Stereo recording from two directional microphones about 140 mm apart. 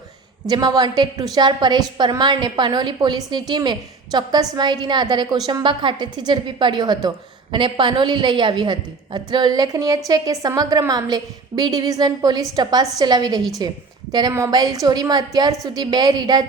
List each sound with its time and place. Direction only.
0.4 s a woman's voice: 30° right (ahead or behind)